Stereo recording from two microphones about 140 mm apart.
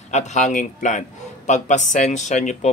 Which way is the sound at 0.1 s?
55° left (ahead or behind).